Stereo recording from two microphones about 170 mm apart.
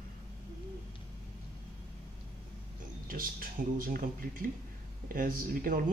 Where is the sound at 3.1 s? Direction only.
55° right (ahead or behind).